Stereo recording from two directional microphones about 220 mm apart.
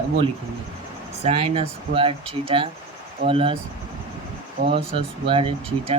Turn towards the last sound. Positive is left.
turn(degrees=-25)  # may be behind; listen again after turning